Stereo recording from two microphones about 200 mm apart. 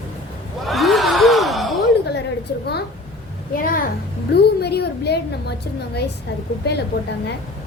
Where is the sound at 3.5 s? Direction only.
45° left (ahead or behind).